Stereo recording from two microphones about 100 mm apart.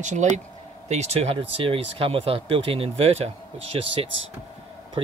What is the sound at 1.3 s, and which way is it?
Speech, 65° right (ahead or behind).